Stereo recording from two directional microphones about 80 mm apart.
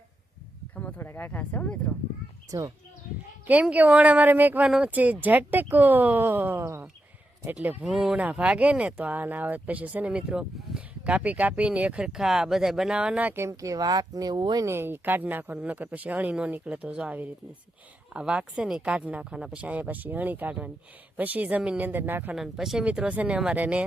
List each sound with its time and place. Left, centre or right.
0.8 s speech: left
2.5 s speech: right
3.4 s speech: centre
4.6 s speech: centre
4.9 s speech: centre
13.2 s speech: right
14.6 s speech: right
22.4 s speech: centre
22.8 s speech: centre